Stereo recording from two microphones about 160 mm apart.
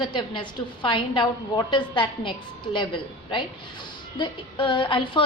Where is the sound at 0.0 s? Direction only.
30° left (ahead or behind).